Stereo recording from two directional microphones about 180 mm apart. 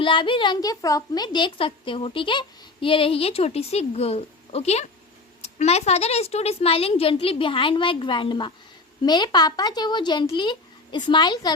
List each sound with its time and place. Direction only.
0.0 s a woman's voice: 25° left (ahead or behind)